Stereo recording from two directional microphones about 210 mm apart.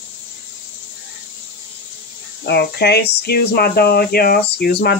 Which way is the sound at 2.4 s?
50° left (ahead or behind).